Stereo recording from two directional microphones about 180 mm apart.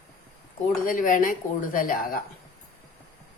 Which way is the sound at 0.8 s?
50° left (ahead or behind).